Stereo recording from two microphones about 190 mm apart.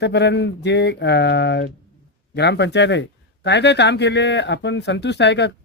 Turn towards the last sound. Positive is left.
turn(degrees=65)  # may be behind; listen again after turning